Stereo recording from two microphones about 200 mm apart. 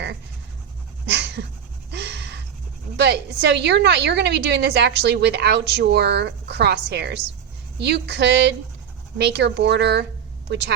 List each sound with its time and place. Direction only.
1.0 s dog: 55° right (ahead or behind)
1.9 s a sound: 55° right (ahead or behind)
3.0 s a woman's voice: 60° right (ahead or behind)